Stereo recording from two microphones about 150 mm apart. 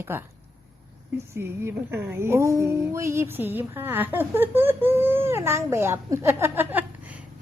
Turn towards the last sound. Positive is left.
turn(degrees=-10)  # may be behind; listen again after turning